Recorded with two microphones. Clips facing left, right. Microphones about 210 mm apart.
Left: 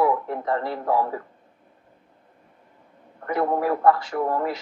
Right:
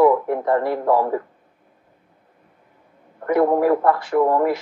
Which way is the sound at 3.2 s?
50° right (ahead or behind).